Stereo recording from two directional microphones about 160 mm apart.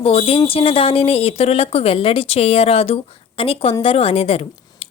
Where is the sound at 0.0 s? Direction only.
40° left (ahead or behind).